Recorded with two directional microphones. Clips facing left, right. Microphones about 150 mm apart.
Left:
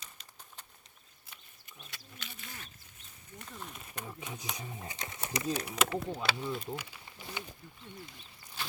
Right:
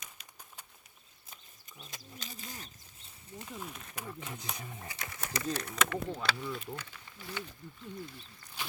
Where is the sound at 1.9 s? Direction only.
40° right (ahead or behind).